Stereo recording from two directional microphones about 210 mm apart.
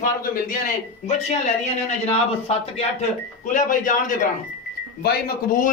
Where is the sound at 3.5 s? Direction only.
40° left (ahead or behind).